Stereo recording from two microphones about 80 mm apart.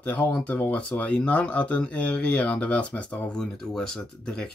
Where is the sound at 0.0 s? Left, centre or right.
Centre.